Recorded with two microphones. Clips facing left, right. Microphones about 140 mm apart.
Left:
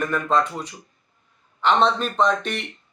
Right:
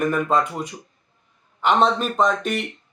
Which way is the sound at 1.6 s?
10° right (ahead or behind).